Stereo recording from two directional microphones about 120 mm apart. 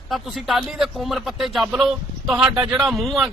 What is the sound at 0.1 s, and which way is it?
Speech, centre (ahead or behind).